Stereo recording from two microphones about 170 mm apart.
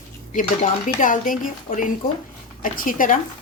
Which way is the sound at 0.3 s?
50° left (ahead or behind).